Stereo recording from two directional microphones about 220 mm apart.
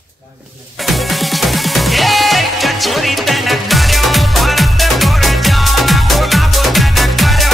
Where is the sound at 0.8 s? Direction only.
Centre (ahead or behind).